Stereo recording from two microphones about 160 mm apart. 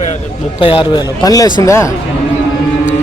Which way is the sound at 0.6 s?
30° left (ahead or behind).